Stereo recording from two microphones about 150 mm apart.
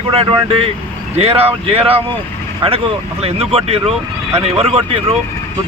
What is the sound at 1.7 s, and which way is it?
Speech, 40° right (ahead or behind).